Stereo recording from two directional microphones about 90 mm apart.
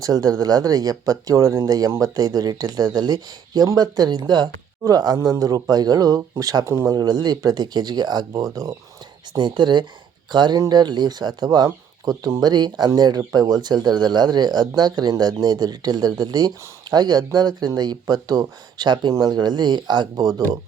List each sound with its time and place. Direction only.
0.0 s speech: 45° right (ahead or behind)
9.3 s speech: 55° right (ahead or behind)